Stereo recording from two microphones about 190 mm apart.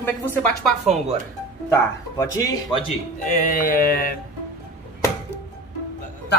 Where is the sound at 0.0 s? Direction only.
10° left (ahead or behind).